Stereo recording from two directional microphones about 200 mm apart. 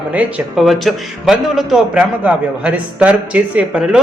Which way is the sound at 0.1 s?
5° right (ahead or behind).